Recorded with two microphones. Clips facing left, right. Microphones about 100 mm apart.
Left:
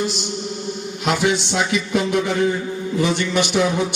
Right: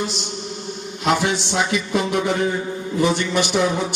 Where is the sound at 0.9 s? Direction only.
35° right (ahead or behind).